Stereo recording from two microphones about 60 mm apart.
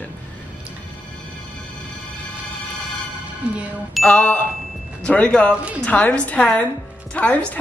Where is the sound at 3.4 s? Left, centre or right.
Centre.